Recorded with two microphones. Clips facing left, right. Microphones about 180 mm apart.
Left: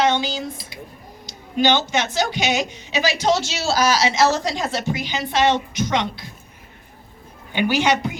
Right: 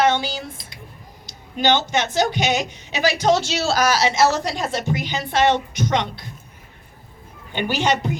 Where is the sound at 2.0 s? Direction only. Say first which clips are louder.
Right 2 dB; 50° right (ahead or behind).